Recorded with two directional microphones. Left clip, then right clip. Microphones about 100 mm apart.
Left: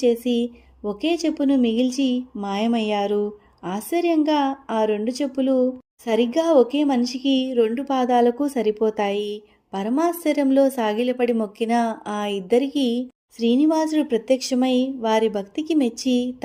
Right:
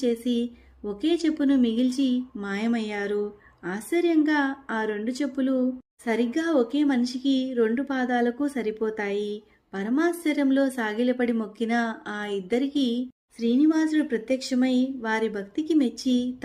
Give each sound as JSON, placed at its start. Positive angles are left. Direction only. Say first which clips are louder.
{"t": 0.0, "sound": "a woman's voice", "louder": "left 6 dB", "side_deg": 40}